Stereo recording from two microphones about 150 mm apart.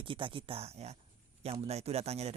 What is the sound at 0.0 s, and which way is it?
Speech, 35° right (ahead or behind).